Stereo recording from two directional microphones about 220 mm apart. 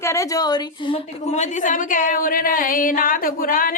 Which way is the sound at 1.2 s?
30° left (ahead or behind).